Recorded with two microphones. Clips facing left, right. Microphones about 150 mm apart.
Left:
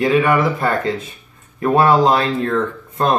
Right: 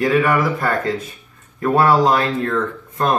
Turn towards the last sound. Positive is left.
turn(degrees=25)  # may be behind; listen again after turning